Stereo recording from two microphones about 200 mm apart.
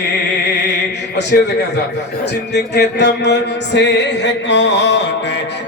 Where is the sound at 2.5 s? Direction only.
55° left (ahead or behind).